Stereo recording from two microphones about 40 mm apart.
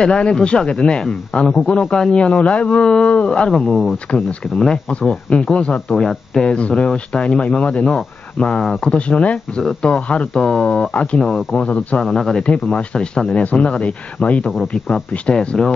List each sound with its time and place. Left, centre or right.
0.0 s speech: left
5.3 s speech: left
5.9 s speech: centre
6.4 s speech: left
8.9 s speech: left
10.3 s speech: centre
10.7 s speech: left
11.1 s speech: centre
11.5 s speech: left
12.0 s speech: centre
12.4 s speech: left